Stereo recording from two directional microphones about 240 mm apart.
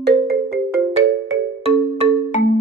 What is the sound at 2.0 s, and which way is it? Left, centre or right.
Music, right.